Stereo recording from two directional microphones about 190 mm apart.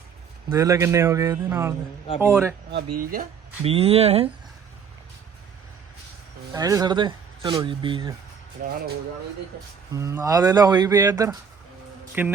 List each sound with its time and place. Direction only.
0.5 s a man's voice: 15° right (ahead or behind)
3.0 s speech: 45° right (ahead or behind)
3.6 s speech: 30° right (ahead or behind)
6.5 s speech: 20° right (ahead or behind)
8.6 s speech: 45° right (ahead or behind)
9.9 s a man's voice: 15° right (ahead or behind)